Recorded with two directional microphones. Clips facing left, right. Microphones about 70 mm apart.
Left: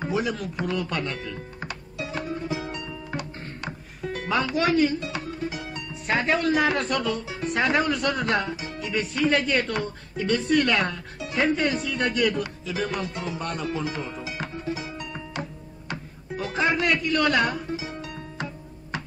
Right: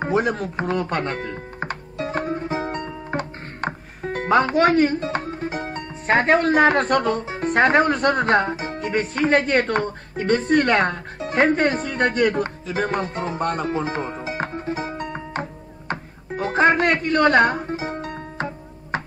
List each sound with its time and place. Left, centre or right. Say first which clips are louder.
0.0 s speech: right 6 dB; right
15.9 s music: right 5 dB; right